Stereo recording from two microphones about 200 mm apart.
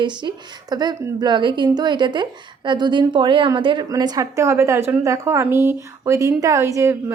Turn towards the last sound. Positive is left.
turn(degrees=-15)  # may be behind; listen again after turning